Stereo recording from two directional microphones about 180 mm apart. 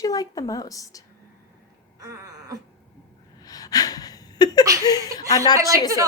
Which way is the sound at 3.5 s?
20° left (ahead or behind).